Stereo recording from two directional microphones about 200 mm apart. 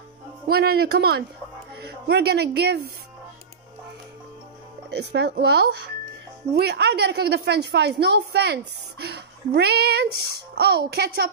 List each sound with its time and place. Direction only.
0.5 s a man's voice: 50° right (ahead or behind)
4.9 s a woman's voice: 55° right (ahead or behind)